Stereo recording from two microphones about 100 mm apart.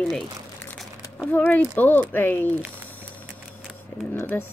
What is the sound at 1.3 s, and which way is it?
Speech, 20° left (ahead or behind).